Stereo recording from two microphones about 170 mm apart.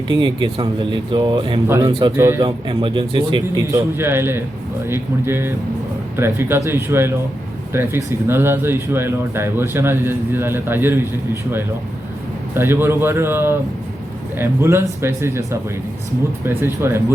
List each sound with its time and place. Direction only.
0.1 s speech: 30° right (ahead or behind)
1.6 s speech: 15° right (ahead or behind)
2.4 s speech: 30° right (ahead or behind); by 11.0 s 15° right (ahead or behind)
12.5 s speech: 15° right (ahead or behind)
16.5 s speech: 15° right (ahead or behind)